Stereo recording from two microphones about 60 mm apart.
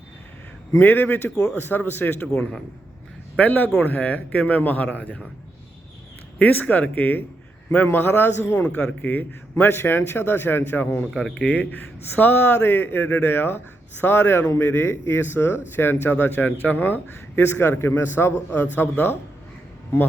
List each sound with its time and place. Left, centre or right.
0.8 s speech: left
2.3 s speech: centre
3.3 s speech: left
6.4 s speech: left